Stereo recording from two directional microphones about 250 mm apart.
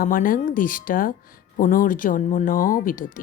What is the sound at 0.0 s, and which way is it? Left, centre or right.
Speech, left.